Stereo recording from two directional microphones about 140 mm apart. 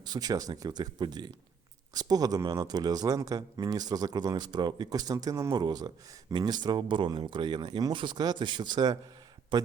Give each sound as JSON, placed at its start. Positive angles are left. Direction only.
{"t": 0.0, "sound": "speech", "side_deg": -30}